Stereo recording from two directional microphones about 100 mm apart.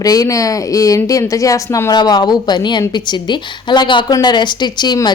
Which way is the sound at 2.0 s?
45° left (ahead or behind).